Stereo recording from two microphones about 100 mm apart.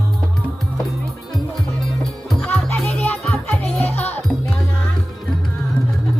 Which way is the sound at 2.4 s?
15° left (ahead or behind).